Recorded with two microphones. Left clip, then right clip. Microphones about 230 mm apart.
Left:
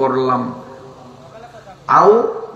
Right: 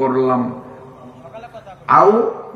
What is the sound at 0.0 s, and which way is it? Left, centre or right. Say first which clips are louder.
Speech: even; left.